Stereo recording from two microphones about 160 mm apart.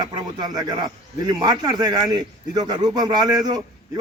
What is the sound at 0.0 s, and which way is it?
A man's voice, 25° right (ahead or behind).